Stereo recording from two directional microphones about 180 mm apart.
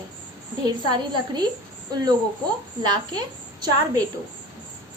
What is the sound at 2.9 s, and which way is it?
A woman's voice, 20° right (ahead or behind).